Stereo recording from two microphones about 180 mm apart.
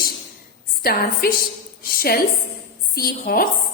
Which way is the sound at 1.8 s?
55° left (ahead or behind).